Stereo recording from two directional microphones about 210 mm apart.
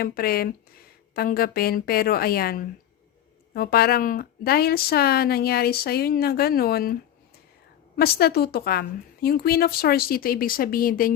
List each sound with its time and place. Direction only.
0.0 s speech: 45° left (ahead or behind)
7.9 s speech: 50° left (ahead or behind)